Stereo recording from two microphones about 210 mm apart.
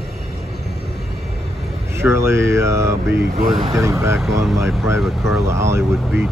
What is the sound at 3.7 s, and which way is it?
Speech, 15° right (ahead or behind).